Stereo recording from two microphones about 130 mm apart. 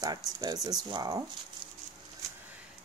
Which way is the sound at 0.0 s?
30° right (ahead or behind).